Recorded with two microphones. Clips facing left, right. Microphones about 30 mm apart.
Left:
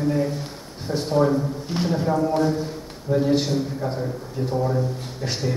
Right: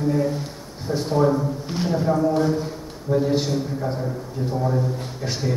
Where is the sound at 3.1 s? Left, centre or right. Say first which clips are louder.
Even; centre.